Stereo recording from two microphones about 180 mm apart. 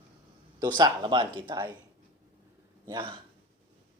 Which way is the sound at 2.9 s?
25° right (ahead or behind).